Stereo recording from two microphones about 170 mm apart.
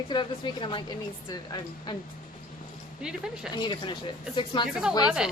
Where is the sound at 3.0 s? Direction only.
5° right (ahead or behind).